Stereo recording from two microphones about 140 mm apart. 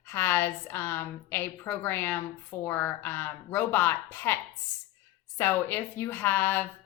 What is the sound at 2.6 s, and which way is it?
A woman's voice, 15° left (ahead or behind).